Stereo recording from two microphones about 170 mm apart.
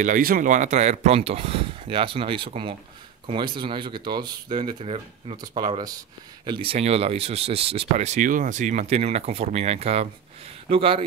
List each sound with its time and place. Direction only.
0.0 s speech: 55° right (ahead or behind); by 11.0 s 35° right (ahead or behind)